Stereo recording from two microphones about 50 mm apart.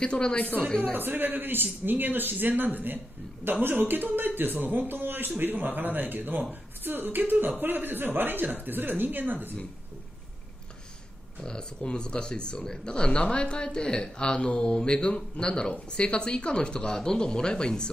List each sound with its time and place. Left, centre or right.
0.0 s speech: left
0.9 s speech: right
11.4 s speech: centre